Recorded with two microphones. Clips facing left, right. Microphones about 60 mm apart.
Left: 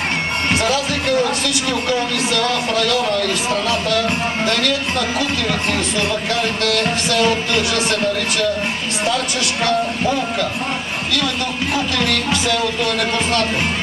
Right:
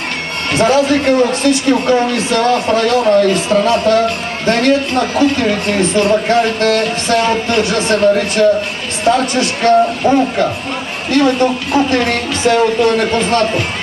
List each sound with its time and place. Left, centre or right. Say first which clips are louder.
0.6 s speech: right 8 dB; right